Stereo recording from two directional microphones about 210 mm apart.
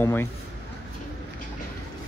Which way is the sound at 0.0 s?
10° left (ahead or behind).